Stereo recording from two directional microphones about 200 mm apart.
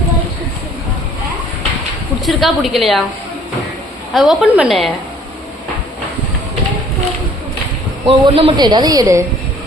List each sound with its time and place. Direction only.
2.2 s a woman's voice: centre (ahead or behind)
4.1 s a woman's voice: centre (ahead or behind)
8.0 s a man's voice: 25° right (ahead or behind)